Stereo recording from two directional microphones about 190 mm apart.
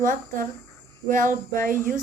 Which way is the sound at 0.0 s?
45° right (ahead or behind).